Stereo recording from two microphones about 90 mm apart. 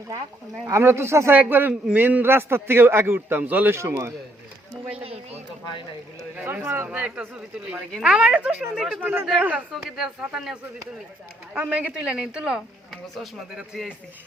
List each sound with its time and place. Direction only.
0.6 s a man's voice: 30° right (ahead or behind)
3.8 s a man's voice: 30° right (ahead or behind)
6.4 s a man's voice: 25° right (ahead or behind)
6.8 s speech: 15° right (ahead or behind)
9.0 s a man's voice: 20° right (ahead or behind)
9.7 s speech: 5° right (ahead or behind)